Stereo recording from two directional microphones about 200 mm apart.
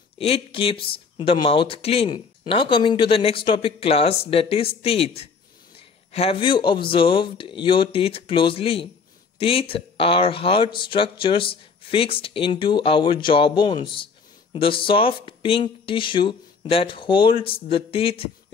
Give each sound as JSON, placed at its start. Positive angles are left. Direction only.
{"t": 0.2, "sound": "speech", "side_deg": 30}